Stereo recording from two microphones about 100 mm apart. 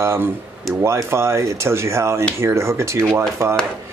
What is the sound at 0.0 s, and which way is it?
Speech, 25° right (ahead or behind).